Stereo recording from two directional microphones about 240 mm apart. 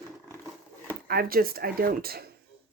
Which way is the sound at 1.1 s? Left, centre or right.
Right.